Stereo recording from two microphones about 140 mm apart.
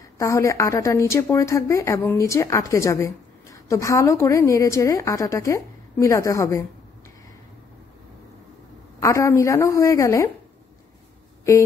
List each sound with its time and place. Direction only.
0.2 s a woman's voice: 20° left (ahead or behind)
9.0 s a woman's voice: 20° left (ahead or behind)